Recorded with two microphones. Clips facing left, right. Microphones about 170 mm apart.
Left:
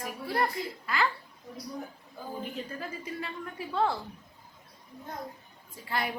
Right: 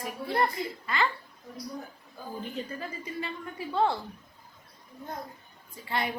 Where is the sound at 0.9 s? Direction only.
5° left (ahead or behind).